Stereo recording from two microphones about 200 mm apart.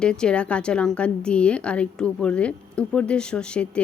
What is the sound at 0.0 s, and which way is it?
A woman's voice, 5° left (ahead or behind).